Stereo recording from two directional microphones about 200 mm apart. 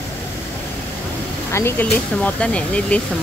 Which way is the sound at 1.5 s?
15° left (ahead or behind).